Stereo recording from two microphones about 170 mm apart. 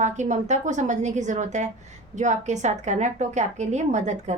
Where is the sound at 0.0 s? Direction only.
45° right (ahead or behind).